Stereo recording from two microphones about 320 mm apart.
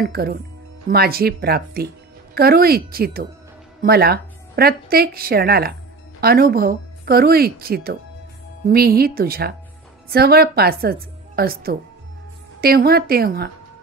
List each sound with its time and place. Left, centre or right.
0.0 s a woman's voice: right